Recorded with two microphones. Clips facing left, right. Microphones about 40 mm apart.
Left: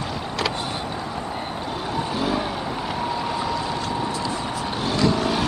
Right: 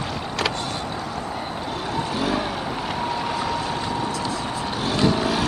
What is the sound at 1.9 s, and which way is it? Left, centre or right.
Vehicle, centre.